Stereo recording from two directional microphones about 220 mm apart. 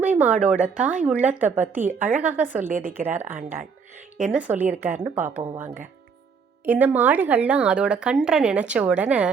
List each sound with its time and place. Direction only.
0.0 s a woman's voice: 5° right (ahead or behind)
2.6 s speech: 35° right (ahead or behind)
3.2 s a woman's voice: 10° right (ahead or behind)
6.7 s a woman's voice: 10° right (ahead or behind)